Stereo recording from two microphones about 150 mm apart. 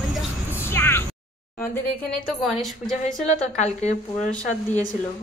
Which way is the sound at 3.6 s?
55° left (ahead or behind).